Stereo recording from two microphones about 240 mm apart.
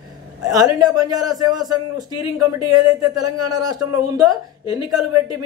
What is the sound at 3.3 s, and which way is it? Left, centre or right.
Speech, centre.